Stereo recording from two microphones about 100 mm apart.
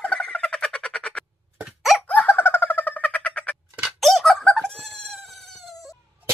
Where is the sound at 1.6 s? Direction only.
Centre (ahead or behind).